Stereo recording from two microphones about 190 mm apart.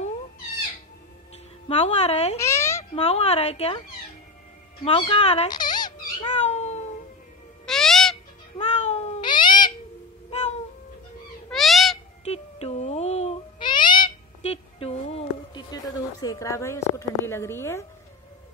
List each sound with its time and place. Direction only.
1.7 s speech: 35° left (ahead or behind)
2.3 s cat: 15° left (ahead or behind)
2.8 s speech: 35° left (ahead or behind)
4.8 s speech: 30° left (ahead or behind)
5.5 s a sound: 20° left (ahead or behind)
6.1 s cat: 35° left (ahead or behind)
7.6 s owl: centre (ahead or behind)
8.5 s cat: 35° left (ahead or behind)
9.2 s cat: 25° left (ahead or behind)
11.5 s cat: centre (ahead or behind)
12.3 s owl: 35° left (ahead or behind)
15.7 s speech: 20° left (ahead or behind)